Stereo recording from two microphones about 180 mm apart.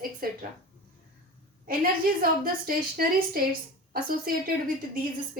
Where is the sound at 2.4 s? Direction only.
55° right (ahead or behind).